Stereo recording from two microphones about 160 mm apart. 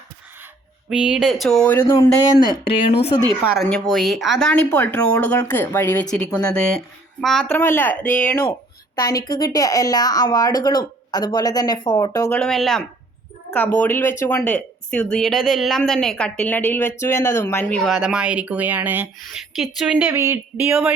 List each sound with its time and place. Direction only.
0.9 s speech: 5° right (ahead or behind); by 2.6 s 25° left (ahead or behind)
2.6 s speech: 40° left (ahead or behind)
3.4 s speech: centre (ahead or behind)
9.0 s speech: 25° left (ahead or behind)
12.4 s speech: centre (ahead or behind); by 20.7 s 15° right (ahead or behind)